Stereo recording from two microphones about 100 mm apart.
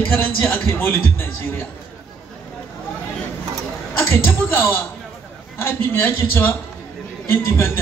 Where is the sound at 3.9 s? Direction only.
20° left (ahead or behind).